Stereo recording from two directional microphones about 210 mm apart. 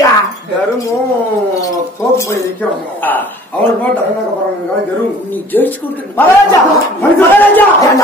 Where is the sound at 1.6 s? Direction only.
15° left (ahead or behind).